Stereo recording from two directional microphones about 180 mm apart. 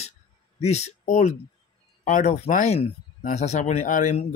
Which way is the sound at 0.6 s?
35° left (ahead or behind).